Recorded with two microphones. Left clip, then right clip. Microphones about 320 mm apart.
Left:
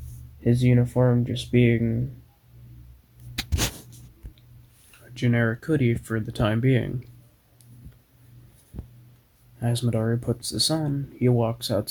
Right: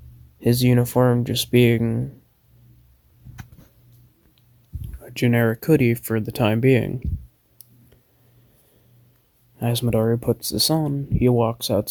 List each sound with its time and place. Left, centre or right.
0.4 s speech: right
5.1 s speech: right
9.6 s speech: right